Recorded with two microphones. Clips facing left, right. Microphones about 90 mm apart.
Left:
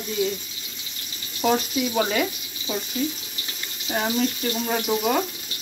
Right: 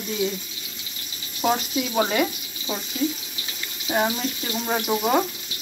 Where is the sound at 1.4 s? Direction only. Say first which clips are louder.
Left 1 dB; 15° right (ahead or behind).